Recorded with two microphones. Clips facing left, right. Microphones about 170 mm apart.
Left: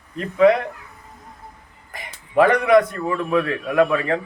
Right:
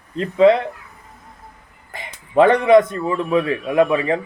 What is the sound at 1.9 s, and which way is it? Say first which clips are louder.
A man's voice: right 2 dB; 25° right (ahead or behind).